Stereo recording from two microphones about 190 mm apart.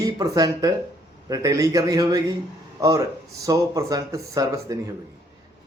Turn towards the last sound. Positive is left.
turn(degrees=-20)  # may be behind; listen again after turning